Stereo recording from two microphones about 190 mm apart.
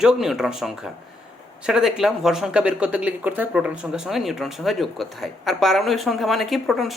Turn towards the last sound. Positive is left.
turn(degrees=0)  # may be behind; listen again after turning